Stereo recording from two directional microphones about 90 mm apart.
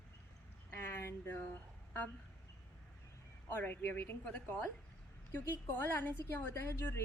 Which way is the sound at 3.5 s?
25° left (ahead or behind).